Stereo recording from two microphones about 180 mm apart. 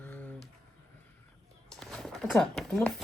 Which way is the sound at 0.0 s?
10° left (ahead or behind).